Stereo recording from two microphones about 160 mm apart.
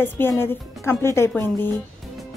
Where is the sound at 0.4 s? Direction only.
15° left (ahead or behind).